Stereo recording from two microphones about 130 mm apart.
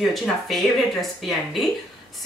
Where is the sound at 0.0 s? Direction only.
Centre (ahead or behind).